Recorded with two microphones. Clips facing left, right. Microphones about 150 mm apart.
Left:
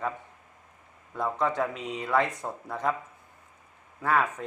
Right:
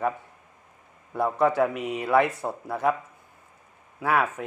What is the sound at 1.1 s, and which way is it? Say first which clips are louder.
Speech: right 5 dB; 10° right (ahead or behind).